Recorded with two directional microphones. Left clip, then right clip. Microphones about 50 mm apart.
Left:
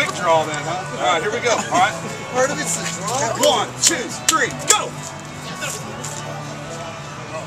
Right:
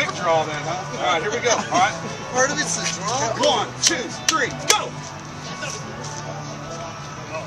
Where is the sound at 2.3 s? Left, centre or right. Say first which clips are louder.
Left 1 dB; right.